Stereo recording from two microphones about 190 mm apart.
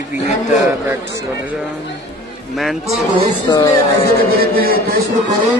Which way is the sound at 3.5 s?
20° left (ahead or behind).